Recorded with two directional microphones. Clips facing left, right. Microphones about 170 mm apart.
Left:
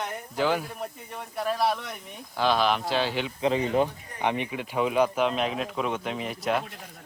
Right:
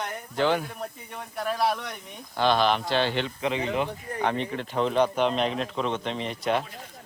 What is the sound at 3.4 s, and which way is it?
Speech, 35° left (ahead or behind).